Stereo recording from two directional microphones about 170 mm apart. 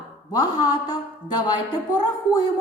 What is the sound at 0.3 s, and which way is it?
Speech, 25° left (ahead or behind).